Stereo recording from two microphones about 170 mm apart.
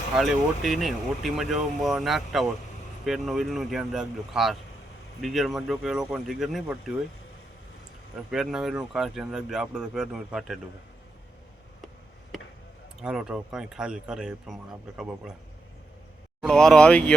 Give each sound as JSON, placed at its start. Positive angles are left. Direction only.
{"t": 0.2, "sound": "speech", "side_deg": 0}
{"t": 8.3, "sound": "speech", "side_deg": -5}
{"t": 13.0, "sound": "speech", "side_deg": -5}
{"t": 16.4, "sound": "speech", "side_deg": 5}